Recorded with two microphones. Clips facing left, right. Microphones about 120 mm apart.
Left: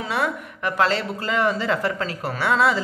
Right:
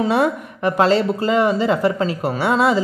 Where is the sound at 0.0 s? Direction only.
25° right (ahead or behind).